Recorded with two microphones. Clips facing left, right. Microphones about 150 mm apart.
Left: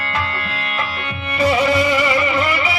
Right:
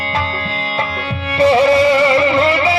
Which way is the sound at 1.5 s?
30° right (ahead or behind).